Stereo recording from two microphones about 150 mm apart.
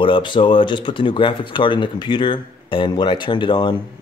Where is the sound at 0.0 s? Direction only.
35° left (ahead or behind).